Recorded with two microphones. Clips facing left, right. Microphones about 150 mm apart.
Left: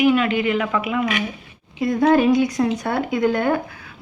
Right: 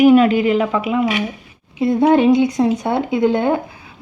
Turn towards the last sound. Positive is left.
turn(degrees=-20)  # may be behind; listen again after turning